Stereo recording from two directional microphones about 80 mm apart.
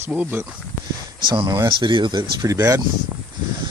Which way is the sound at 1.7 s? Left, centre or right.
Right.